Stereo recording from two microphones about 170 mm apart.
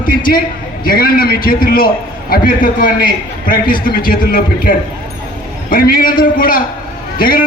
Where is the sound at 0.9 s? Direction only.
60° left (ahead or behind).